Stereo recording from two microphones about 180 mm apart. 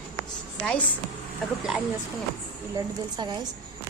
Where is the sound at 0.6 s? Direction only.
5° left (ahead or behind).